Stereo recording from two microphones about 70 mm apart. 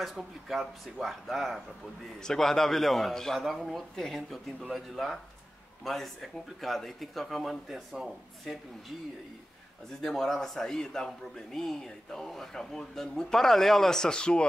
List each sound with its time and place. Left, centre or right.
0.0 s a man's voice: centre
10.0 s a man's voice: centre